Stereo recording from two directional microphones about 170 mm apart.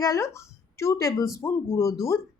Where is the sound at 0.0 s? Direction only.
20° left (ahead or behind).